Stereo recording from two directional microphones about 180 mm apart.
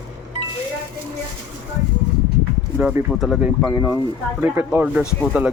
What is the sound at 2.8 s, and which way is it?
Speech, 5° right (ahead or behind).